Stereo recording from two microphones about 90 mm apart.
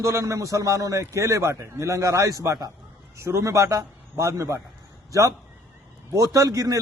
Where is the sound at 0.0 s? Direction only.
35° right (ahead or behind).